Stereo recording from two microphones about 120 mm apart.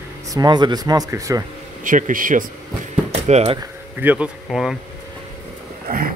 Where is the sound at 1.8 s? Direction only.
90° right.